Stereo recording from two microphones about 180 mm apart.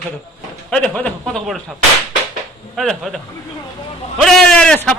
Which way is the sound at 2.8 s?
Centre (ahead or behind).